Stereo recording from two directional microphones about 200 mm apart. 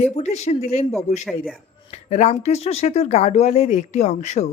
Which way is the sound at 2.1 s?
35° left (ahead or behind).